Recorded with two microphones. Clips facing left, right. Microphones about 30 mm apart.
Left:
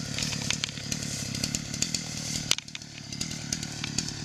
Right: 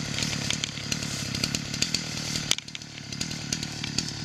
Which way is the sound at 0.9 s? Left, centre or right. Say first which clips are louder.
Right 3 dB; right.